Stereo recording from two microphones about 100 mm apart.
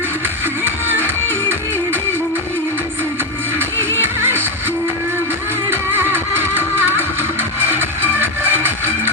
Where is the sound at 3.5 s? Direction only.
25° right (ahead or behind).